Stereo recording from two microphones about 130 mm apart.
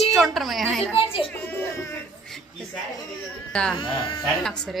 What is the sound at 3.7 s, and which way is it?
Speech, 40° left (ahead or behind).